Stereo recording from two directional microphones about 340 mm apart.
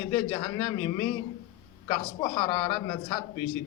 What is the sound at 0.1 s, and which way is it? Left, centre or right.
Speech, centre.